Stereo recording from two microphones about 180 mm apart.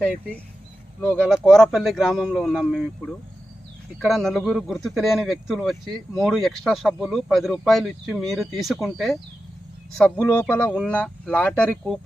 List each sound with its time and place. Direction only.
1.0 s speech: 5° left (ahead or behind)
4.0 s speech: centre (ahead or behind)